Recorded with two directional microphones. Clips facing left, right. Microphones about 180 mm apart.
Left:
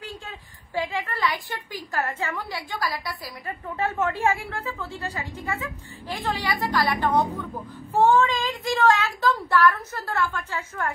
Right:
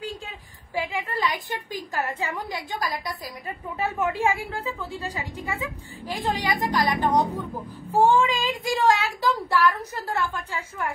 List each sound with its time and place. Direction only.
0.7 s a woman's voice: 10° right (ahead or behind)